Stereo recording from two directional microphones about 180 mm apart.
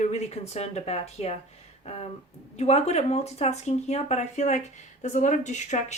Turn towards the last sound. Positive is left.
turn(degrees=40)  # may be behind; listen again after turning